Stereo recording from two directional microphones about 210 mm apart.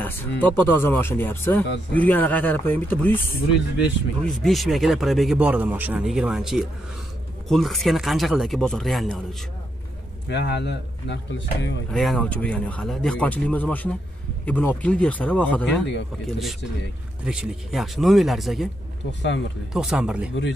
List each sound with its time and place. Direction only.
0.0 s speech: 10° left (ahead or behind)
10.3 s speech: 55° left (ahead or behind)
11.9 s speech: centre (ahead or behind)
19.7 s speech: 5° right (ahead or behind)